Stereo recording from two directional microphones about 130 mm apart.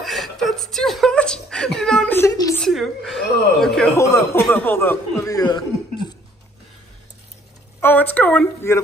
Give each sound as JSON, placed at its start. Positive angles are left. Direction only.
{"t": 0.0, "sound": "whimper", "side_deg": 0}
{"t": 2.1, "sound": "a sound", "side_deg": 25}
{"t": 2.7, "sound": "a woman's voice", "side_deg": 0}
{"t": 3.9, "sound": "speech", "side_deg": 25}
{"t": 7.8, "sound": "a woman's voice", "side_deg": 15}